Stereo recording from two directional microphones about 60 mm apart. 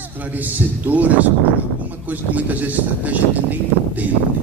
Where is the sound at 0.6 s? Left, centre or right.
Right.